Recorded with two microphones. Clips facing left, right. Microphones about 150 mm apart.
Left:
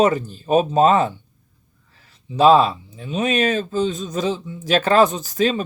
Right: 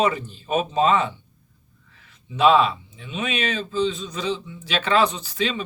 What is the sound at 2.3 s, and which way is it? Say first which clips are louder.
A man's voice: left 4 dB; 35° left (ahead or behind).